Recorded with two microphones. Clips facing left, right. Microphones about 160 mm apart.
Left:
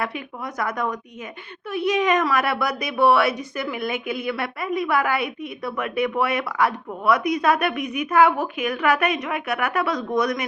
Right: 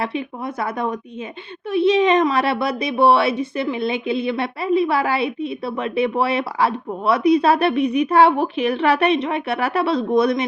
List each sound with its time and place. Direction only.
0.0 s speech: 25° right (ahead or behind)